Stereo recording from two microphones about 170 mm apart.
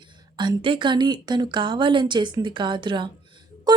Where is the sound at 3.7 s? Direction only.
25° right (ahead or behind).